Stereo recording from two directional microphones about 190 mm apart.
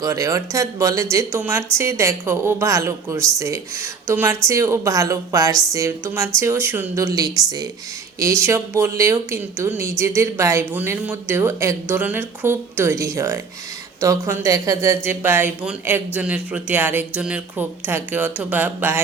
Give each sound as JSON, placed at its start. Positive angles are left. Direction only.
{"t": 0.0, "sound": "speech", "side_deg": -15}